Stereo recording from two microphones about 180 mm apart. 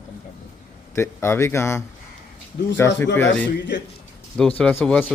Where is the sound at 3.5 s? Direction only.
75° left (ahead or behind).